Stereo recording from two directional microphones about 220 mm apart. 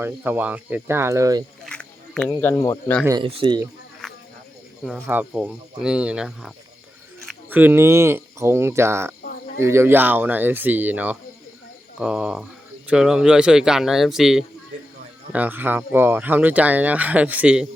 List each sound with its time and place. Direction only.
0.0 s speech: 10° right (ahead or behind)
1.6 s speech: 5° left (ahead or behind)
3.0 s speech: 15° right (ahead or behind)
4.0 s snake: centre (ahead or behind)
4.8 s speech: centre (ahead or behind)